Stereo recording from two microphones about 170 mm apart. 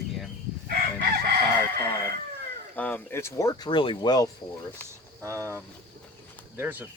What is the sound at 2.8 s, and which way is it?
Speech, 10° left (ahead or behind).